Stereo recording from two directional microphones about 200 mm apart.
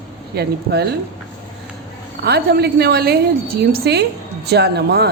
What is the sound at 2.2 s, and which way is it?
A woman's voice, 55° right (ahead or behind).